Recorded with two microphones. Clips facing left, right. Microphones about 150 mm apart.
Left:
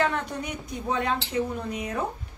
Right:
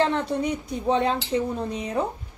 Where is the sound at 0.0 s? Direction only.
30° right (ahead or behind).